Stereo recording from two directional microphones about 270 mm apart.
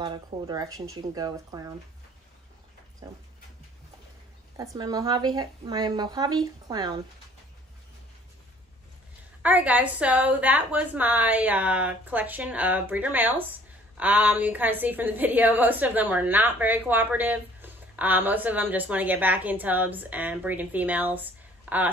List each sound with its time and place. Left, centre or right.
0.0 s a woman's voice: centre
4.6 s a woman's voice: centre
9.4 s a woman's voice: centre